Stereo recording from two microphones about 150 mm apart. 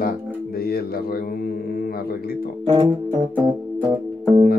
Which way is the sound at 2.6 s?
30° right (ahead or behind).